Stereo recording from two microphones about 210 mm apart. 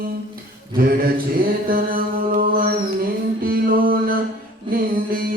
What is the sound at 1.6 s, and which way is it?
Music, 45° right (ahead or behind).